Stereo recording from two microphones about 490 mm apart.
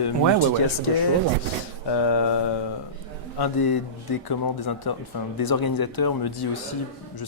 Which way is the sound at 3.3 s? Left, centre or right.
Left.